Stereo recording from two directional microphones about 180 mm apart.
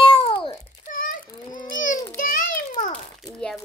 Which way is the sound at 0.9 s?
45° left (ahead or behind).